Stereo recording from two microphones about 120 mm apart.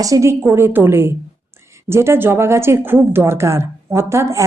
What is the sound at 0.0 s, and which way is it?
Speech, 25° right (ahead or behind).